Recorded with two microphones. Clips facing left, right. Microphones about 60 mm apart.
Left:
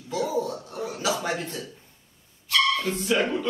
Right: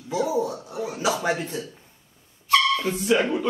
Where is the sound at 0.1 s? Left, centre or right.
Centre.